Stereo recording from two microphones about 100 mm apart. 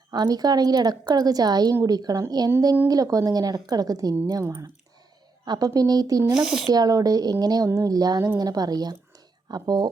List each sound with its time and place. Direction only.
0.1 s a woman's voice: 40° right (ahead or behind)
6.3 s speech: 5° right (ahead or behind)
6.7 s a woman's voice: 40° right (ahead or behind)